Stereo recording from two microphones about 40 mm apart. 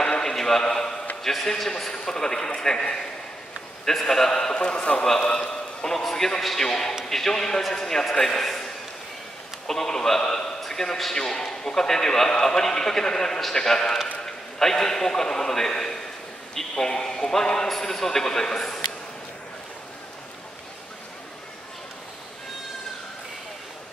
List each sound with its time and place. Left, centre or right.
0.0 s a sound: centre
1.2 s a man's voice: centre
3.8 s a man's voice: centre
5.9 s a man's voice: centre
9.7 s a man's voice: centre